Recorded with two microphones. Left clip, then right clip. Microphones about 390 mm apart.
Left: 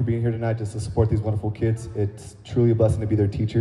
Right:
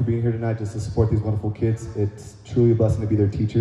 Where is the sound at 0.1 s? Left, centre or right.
Left.